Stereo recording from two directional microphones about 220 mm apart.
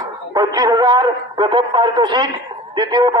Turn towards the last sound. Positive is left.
turn(degrees=-20)  # may be behind; listen again after turning